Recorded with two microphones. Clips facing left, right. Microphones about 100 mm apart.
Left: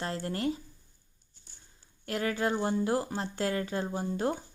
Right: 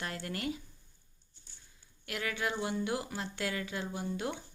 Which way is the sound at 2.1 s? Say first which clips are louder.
Left 6 dB; 35° left (ahead or behind).